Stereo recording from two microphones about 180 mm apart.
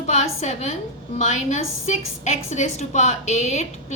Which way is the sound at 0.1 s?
40° left (ahead or behind).